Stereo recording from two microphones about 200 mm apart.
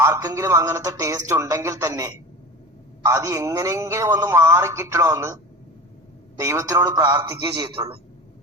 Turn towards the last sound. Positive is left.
turn(degrees=-25)  # may be behind; listen again after turning